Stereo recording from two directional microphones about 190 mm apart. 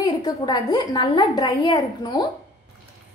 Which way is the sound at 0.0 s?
20° left (ahead or behind).